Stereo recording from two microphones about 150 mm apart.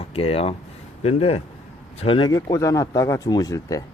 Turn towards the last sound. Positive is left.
turn(degrees=25)  # may be behind; listen again after turning